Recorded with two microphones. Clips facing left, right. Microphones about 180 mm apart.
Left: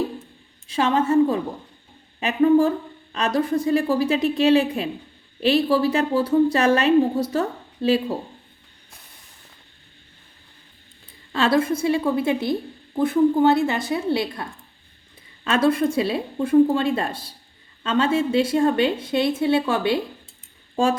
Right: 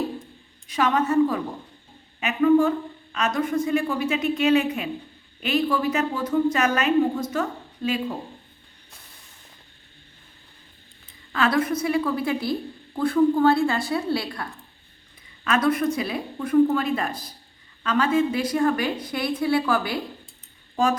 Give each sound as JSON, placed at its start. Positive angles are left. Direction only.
{"t": 0.7, "sound": "speech", "side_deg": 30}
{"t": 11.3, "sound": "speech", "side_deg": 25}
{"t": 15.4, "sound": "speech", "side_deg": 30}